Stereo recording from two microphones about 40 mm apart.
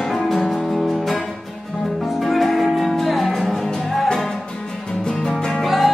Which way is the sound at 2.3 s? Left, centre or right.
Centre.